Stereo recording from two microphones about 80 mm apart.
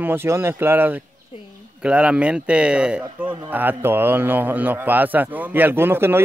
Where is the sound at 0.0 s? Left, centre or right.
Right.